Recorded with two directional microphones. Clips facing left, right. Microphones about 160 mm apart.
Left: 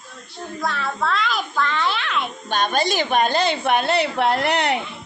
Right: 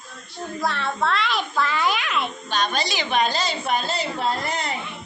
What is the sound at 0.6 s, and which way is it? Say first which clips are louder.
A child's voice: even; centre (ahead or behind).